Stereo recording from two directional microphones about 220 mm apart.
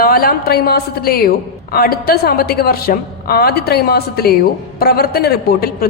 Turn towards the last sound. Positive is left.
turn(degrees=45)  # may be behind; listen again after turning